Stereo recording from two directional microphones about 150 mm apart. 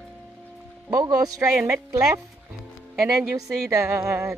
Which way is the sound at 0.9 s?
25° right (ahead or behind).